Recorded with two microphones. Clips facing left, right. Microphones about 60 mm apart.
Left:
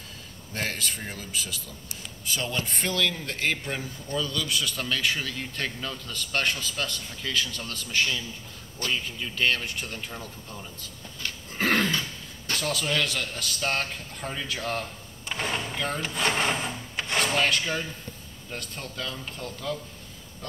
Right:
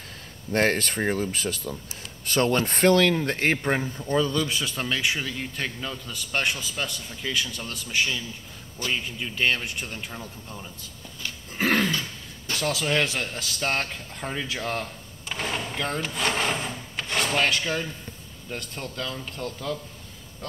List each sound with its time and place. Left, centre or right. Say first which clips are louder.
0.5 s speech: right 9 dB; right
4.0 s a man's voice: right 4 dB; right; by 10.7 s centre
11.2 s a sound: right 1 dB; centre
12.8 s a man's voice: right 3 dB; right
15.2 s drawer open or close: even; centre
18.5 s a man's voice: right 3 dB; centre